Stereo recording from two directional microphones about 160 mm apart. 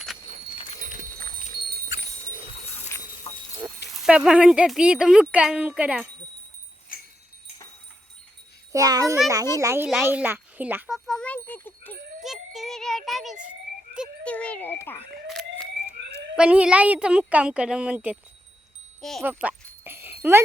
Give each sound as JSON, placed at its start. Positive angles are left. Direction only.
{"t": 3.3, "sound": "a sound", "side_deg": 40}
{"t": 3.9, "sound": "speech", "side_deg": -5}
{"t": 6.9, "sound": "a sound", "side_deg": 65}
{"t": 8.7, "sound": "a child's voice", "side_deg": -20}
{"t": 9.8, "sound": "speech", "side_deg": 0}
{"t": 10.1, "sound": "speech", "side_deg": -10}
{"t": 12.2, "sound": "a sound", "side_deg": 0}
{"t": 14.3, "sound": "a child's voice", "side_deg": 10}
{"t": 16.3, "sound": "a woman's voice", "side_deg": -5}
{"t": 19.2, "sound": "dog", "side_deg": -10}